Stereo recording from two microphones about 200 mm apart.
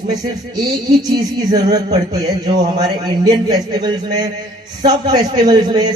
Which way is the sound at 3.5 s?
20° right (ahead or behind).